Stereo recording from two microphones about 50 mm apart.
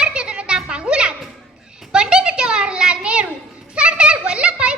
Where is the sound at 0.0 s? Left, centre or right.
Right.